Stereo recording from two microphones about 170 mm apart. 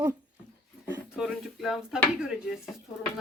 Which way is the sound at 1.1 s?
Centre (ahead or behind).